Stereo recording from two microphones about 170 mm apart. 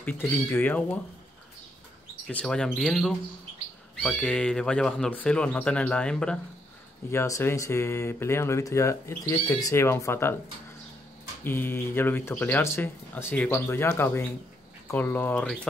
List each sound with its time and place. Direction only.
0.0 s speech: 10° left (ahead or behind)
2.2 s speech: 5° left (ahead or behind)
7.1 s speech: 15° left (ahead or behind)
11.4 s speech: 10° left (ahead or behind)